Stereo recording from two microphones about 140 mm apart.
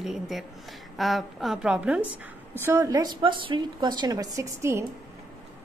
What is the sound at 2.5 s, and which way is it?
A woman's voice, 20° right (ahead or behind).